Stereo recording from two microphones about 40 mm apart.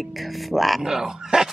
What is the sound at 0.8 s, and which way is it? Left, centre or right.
Speech, centre.